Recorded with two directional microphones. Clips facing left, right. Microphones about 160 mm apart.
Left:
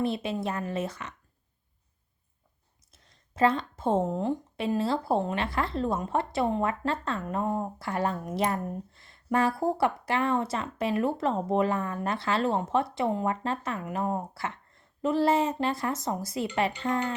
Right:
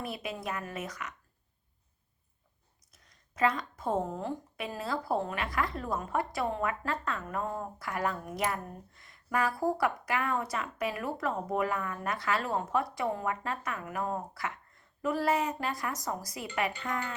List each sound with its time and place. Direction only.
0.0 s speech: 25° left (ahead or behind)
2.9 s speech: 30° left (ahead or behind)